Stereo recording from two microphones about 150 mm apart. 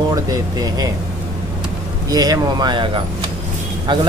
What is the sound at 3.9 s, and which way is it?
Speech, 30° right (ahead or behind).